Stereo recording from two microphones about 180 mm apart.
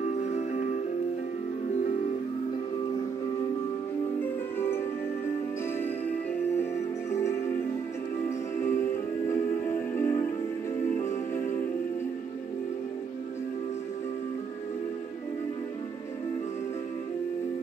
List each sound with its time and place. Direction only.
0.0 s music: 40° left (ahead or behind)
4.2 s music: 15° left (ahead or behind)
6.5 s music: 15° left (ahead or behind)
9.3 s music: 15° left (ahead or behind)